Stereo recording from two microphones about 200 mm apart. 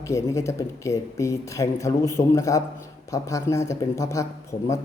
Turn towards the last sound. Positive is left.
turn(degrees=15)  # may be behind; listen again after turning